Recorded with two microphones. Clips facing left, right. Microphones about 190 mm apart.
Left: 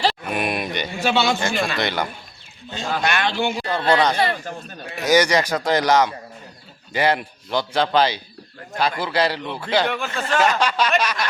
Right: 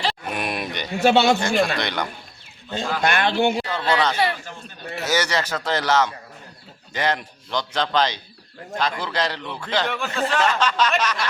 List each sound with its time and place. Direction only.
0.3 s a sound: centre (ahead or behind)
0.9 s a man's voice: 60° right (ahead or behind)
1.4 s speech: centre (ahead or behind)
2.6 s a man's voice: 55° right (ahead or behind)
3.7 s a man's voice: 15° left (ahead or behind)